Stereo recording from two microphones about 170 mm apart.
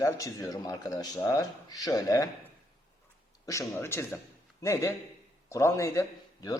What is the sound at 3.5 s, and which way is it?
A woman's voice, 15° left (ahead or behind).